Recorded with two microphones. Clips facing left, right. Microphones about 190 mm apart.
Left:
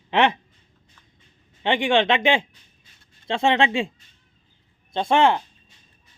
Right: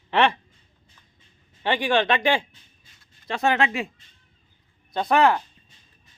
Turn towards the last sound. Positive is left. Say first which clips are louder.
# left 1 dB
turn(degrees=25)  # may be behind; listen again after turning